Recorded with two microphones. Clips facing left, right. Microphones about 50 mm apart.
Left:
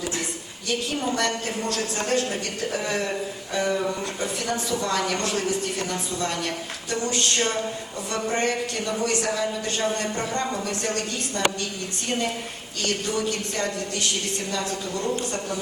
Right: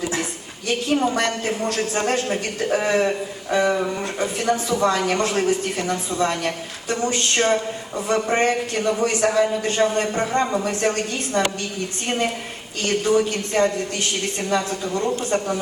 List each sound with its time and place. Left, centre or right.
0.7 s speech: right
4.2 s speech: right
12.9 s speech: right